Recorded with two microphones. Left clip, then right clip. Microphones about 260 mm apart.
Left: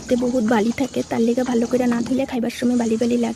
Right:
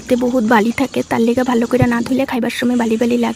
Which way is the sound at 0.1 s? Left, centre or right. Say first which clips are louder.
Right 6 dB; right.